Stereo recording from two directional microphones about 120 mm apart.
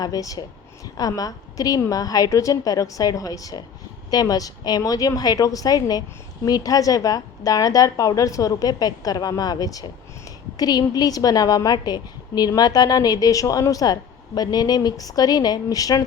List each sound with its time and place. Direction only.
0.0 s a woman's voice: 30° left (ahead or behind)